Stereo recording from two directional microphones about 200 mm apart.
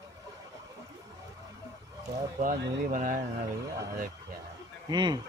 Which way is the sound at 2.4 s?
40° right (ahead or behind).